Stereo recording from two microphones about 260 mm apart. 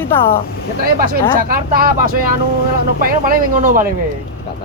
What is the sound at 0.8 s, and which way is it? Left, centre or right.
Speech, right.